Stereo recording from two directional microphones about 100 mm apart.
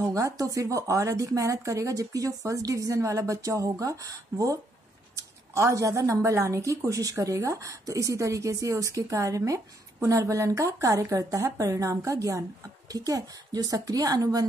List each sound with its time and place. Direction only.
0.0 s a woman's voice: 35° right (ahead or behind)